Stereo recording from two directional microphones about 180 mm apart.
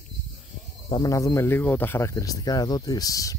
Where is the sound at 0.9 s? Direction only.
20° left (ahead or behind).